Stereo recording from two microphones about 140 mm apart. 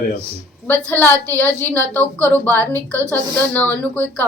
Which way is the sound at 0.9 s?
15° left (ahead or behind).